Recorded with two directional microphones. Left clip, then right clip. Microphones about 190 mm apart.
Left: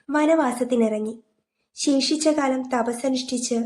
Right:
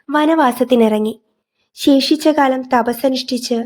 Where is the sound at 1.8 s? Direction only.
40° right (ahead or behind).